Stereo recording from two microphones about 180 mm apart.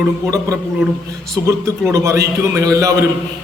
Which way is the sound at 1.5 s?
15° right (ahead or behind).